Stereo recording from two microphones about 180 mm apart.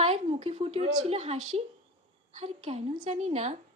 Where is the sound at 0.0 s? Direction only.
30° right (ahead or behind).